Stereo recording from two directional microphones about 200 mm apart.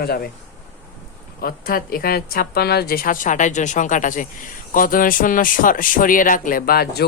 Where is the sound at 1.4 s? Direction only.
50° left (ahead or behind).